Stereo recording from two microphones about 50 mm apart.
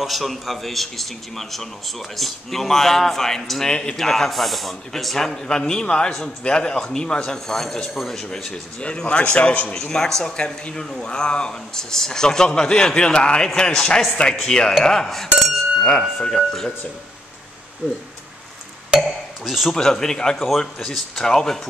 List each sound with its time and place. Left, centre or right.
0.0 s a man's voice: centre
8.8 s a man's voice: left
9.8 s a man's voice: centre
18.9 s speech: centre
19.7 s a man's voice: centre